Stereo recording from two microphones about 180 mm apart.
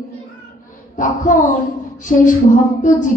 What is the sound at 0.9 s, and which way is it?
A child's voice, 45° left (ahead or behind).